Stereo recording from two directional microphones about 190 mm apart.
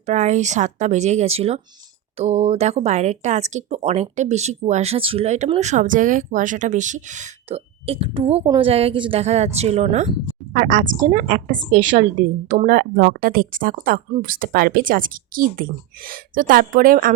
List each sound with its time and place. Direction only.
0.0 s speech: 40° right (ahead or behind)